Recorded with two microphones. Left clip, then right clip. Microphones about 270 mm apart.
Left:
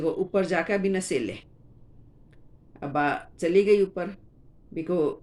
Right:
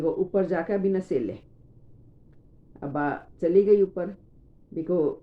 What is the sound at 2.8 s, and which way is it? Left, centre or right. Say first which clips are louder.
Speech: left 3 dB; left.